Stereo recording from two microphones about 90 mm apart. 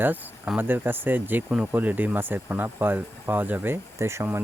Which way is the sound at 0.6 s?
25° right (ahead or behind).